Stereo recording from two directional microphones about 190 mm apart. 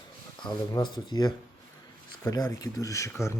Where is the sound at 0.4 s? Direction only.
25° left (ahead or behind).